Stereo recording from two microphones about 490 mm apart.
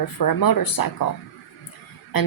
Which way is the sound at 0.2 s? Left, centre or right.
Left.